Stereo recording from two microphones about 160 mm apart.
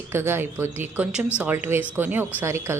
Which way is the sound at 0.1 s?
15° right (ahead or behind).